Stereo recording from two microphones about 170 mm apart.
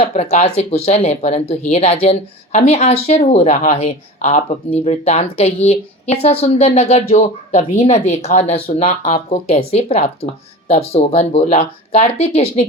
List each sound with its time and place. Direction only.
0.1 s speech: 40° left (ahead or behind)